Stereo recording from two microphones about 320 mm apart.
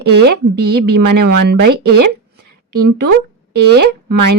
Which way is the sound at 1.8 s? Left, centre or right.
Right.